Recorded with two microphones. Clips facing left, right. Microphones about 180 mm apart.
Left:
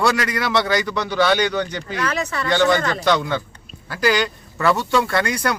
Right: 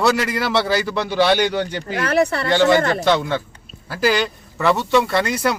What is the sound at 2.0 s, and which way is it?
Speech, 60° right (ahead or behind).